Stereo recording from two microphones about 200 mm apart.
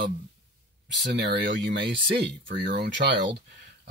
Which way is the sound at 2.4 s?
50° right (ahead or behind).